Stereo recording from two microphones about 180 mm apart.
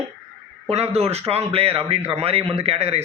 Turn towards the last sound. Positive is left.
turn(degrees=-35)  # may be behind; listen again after turning